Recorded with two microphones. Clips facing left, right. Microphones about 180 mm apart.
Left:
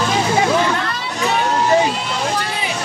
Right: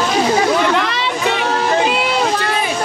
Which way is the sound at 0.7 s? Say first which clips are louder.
Right 5 dB; 90° right.